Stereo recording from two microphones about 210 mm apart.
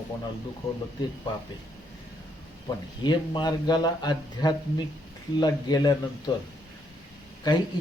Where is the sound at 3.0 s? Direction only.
20° left (ahead or behind).